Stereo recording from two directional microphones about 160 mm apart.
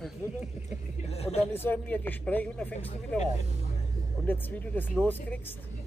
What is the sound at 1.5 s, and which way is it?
Speech, 15° left (ahead or behind).